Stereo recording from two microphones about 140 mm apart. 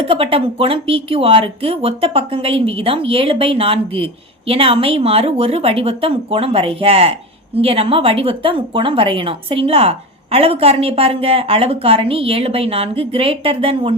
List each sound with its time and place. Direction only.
0.0 s a woman's voice: 40° right (ahead or behind)